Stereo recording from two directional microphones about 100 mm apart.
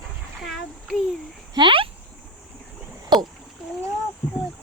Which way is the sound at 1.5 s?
55° right (ahead or behind).